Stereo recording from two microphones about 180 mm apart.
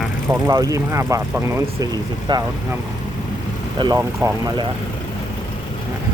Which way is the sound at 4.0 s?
15° right (ahead or behind).